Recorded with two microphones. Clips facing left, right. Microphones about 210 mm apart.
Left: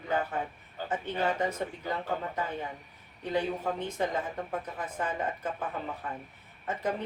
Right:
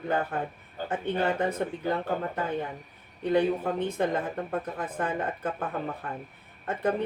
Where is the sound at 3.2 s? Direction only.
55° right (ahead or behind).